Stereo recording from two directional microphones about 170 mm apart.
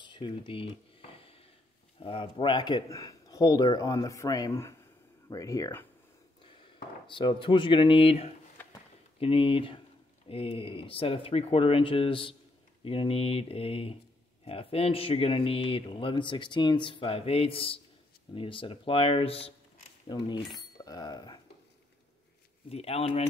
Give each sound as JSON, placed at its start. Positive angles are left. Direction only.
{"t": 0.0, "sound": "a sound", "side_deg": 25}
{"t": 2.0, "sound": "speech", "side_deg": 30}
{"t": 6.4, "sound": "speech", "side_deg": 30}
{"t": 22.7, "sound": "speech", "side_deg": 35}